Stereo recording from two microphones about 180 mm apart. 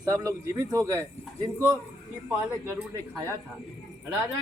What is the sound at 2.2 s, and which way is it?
Speech, 15° right (ahead or behind).